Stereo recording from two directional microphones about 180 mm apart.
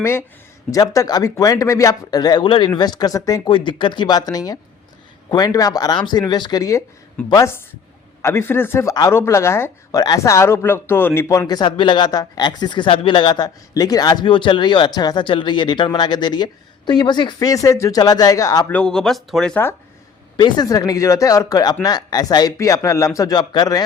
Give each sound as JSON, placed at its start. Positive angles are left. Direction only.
{"t": 0.0, "sound": "speech", "side_deg": 15}
{"t": 18.7, "sound": "speech", "side_deg": 5}
{"t": 20.3, "sound": "speech", "side_deg": 25}